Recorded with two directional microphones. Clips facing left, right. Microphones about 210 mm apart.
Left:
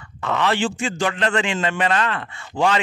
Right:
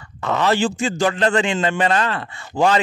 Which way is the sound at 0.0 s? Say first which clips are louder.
Right 2 dB; 35° right (ahead or behind).